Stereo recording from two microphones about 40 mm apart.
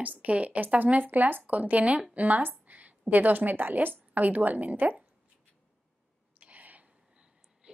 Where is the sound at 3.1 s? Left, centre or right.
Right.